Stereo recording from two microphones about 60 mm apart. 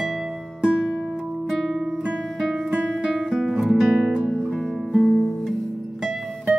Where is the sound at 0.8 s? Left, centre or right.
Centre.